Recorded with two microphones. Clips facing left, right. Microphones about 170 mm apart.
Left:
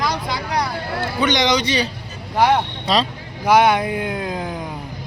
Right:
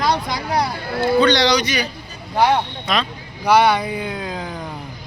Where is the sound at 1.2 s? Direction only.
20° left (ahead or behind).